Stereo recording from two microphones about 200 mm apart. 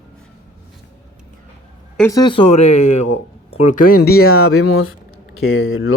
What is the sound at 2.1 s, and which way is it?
Speech, 20° left (ahead or behind).